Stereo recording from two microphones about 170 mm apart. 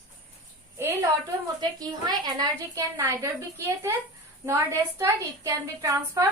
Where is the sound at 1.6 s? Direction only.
25° right (ahead or behind).